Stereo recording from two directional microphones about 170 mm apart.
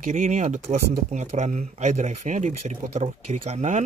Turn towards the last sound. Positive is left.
turn(degrees=-45)  # may be behind; listen again after turning